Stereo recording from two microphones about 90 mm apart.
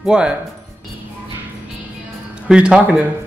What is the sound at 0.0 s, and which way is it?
Speech, 10° right (ahead or behind).